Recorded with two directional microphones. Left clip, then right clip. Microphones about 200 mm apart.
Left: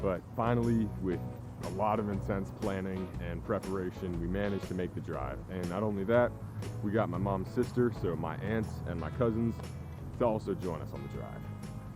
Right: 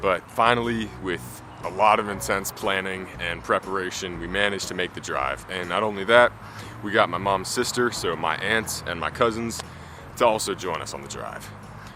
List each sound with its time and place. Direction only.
0.0 s speech: 10° right (ahead or behind)